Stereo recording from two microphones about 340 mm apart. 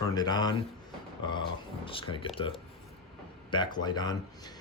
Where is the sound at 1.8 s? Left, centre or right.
Centre.